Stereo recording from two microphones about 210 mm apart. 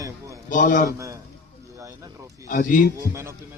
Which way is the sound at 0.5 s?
40° left (ahead or behind).